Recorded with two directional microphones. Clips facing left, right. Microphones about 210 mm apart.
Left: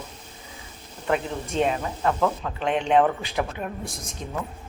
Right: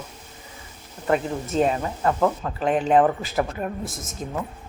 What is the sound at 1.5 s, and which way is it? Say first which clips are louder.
Speech: right 2 dB; 40° right (ahead or behind).